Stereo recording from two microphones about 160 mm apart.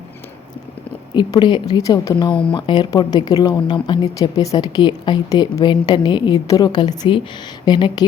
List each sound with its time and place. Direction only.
1.1 s a woman's voice: 30° left (ahead or behind)